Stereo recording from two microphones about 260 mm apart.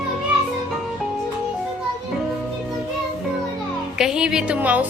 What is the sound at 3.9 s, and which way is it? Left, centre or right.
Speech, centre.